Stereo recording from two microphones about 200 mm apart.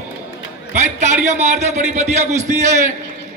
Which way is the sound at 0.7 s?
35° right (ahead or behind).